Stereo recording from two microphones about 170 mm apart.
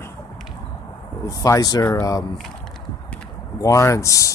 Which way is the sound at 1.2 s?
20° left (ahead or behind).